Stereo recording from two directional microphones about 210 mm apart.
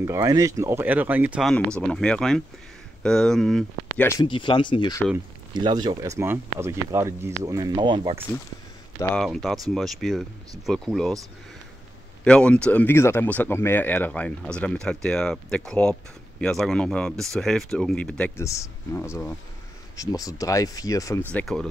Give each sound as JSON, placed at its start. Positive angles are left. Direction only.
{"t": 0.0, "sound": "speech", "side_deg": -15}
{"t": 4.1, "sound": "speech", "side_deg": 20}
{"t": 5.5, "sound": "speech", "side_deg": -20}
{"t": 9.1, "sound": "speech", "side_deg": 0}
{"t": 12.3, "sound": "speech", "side_deg": 5}
{"t": 18.4, "sound": "speech", "side_deg": 15}